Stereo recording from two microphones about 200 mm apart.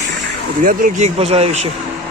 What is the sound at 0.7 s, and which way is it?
Speech, 40° right (ahead or behind).